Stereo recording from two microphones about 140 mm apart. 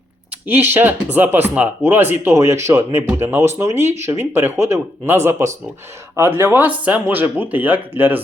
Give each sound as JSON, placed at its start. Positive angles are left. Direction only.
{"t": 0.4, "sound": "speech", "side_deg": -15}